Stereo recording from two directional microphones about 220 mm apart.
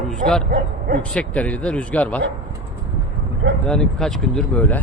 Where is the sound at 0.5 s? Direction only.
40° right (ahead or behind).